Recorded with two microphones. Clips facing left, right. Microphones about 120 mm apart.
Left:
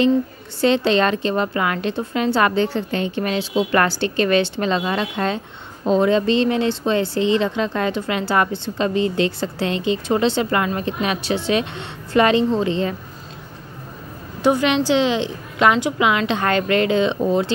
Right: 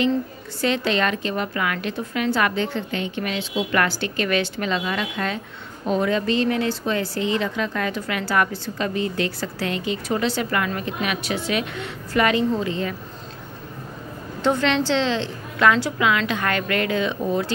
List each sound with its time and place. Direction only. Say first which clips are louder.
0.6 s a woman's voice: left 5 dB; 30° left (ahead or behind)
14.4 s a woman's voice: left 3 dB; 10° left (ahead or behind)